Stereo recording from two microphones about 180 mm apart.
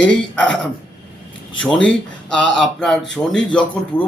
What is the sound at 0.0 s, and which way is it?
Speech, 5° left (ahead or behind).